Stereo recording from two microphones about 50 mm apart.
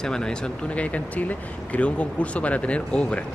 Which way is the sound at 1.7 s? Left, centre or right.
Left.